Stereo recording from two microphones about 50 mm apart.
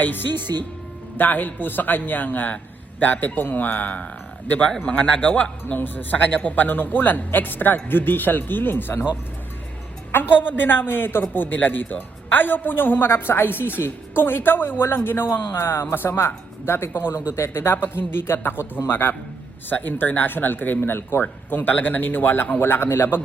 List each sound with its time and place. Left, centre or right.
1.1 s a man's voice: left
5.8 s a man's voice: left
10.4 s a man's voice: left
19.7 s a man's voice: left
22.6 s a man's voice: left